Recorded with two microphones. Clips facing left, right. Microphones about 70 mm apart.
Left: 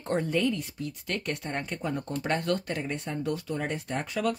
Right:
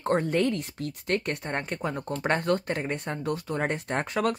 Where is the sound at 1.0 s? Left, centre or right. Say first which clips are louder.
Right 5 dB; right.